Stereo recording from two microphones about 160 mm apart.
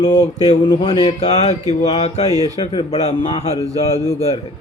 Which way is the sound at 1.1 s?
40° left (ahead or behind).